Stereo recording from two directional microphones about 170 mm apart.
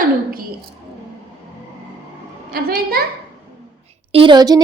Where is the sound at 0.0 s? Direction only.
55° right (ahead or behind).